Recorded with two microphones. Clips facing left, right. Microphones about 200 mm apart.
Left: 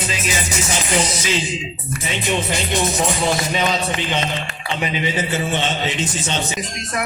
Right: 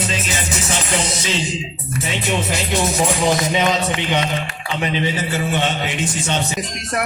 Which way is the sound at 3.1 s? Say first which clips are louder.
Right 2 dB; 15° right (ahead or behind).